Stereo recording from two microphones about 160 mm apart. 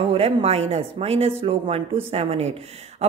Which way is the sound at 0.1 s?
40° right (ahead or behind).